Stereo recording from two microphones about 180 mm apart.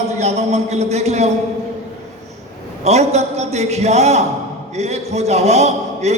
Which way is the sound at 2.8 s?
35° right (ahead or behind).